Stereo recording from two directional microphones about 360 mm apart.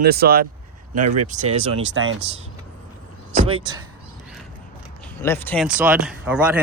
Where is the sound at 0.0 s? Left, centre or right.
Right.